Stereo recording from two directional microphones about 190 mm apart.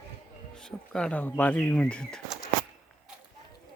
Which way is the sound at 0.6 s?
5° left (ahead or behind).